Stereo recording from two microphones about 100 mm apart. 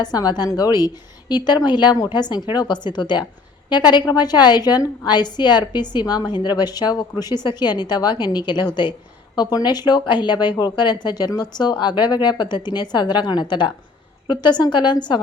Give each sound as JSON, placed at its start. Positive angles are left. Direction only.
{"t": 0.0, "sound": "a woman's voice", "side_deg": 40}